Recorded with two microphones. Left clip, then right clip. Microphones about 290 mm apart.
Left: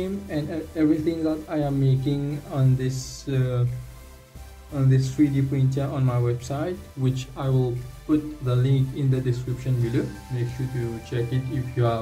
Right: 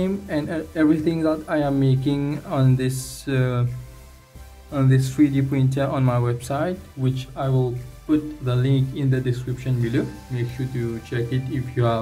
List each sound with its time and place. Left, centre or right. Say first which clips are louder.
0.0 s speech: right 4 dB; centre
4.7 s speech: right 3 dB; centre
7.0 s speech: right 3 dB; centre
11.1 s speech: right 2 dB; centre